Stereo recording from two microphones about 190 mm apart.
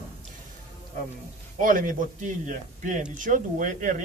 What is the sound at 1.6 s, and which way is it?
A man's voice, 45° right (ahead or behind).